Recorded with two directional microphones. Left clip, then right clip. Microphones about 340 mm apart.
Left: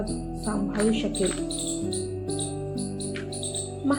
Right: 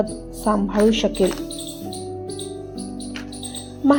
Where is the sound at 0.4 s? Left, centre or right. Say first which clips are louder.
Right 9 dB; right.